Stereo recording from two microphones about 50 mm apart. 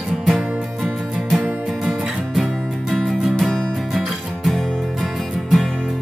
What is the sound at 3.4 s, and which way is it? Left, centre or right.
Music, centre.